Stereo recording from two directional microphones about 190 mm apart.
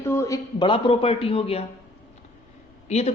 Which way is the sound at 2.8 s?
35° left (ahead or behind).